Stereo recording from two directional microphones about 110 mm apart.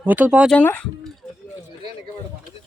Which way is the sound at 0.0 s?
15° right (ahead or behind).